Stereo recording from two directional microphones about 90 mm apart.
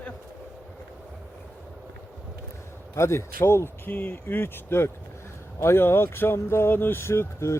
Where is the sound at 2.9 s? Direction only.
30° left (ahead or behind).